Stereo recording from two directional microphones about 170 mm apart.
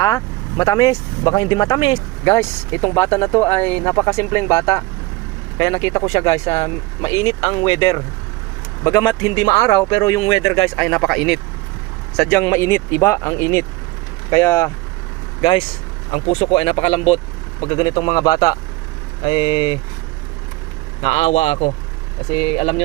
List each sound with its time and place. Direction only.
0.0 s speech: 25° left (ahead or behind)
7.4 s speech: 30° left (ahead or behind)
10.8 s speech: 5° left (ahead or behind)
12.4 s speech: 15° left (ahead or behind)
15.4 s speech: 25° left (ahead or behind)
21.0 s speech: 35° left (ahead or behind)